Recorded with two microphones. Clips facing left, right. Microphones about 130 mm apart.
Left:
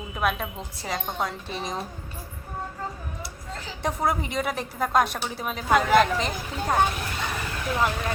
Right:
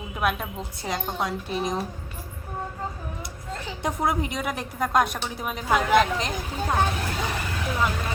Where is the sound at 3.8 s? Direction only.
Centre (ahead or behind).